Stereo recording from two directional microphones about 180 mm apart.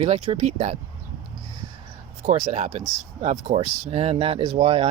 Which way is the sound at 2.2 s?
35° right (ahead or behind).